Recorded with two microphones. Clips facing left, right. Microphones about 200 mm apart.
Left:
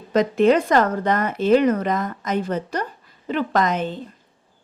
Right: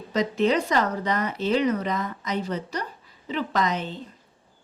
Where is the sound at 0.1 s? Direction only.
55° left (ahead or behind).